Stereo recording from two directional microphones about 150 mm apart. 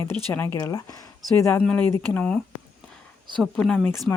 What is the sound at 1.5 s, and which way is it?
Speech, 10° left (ahead or behind).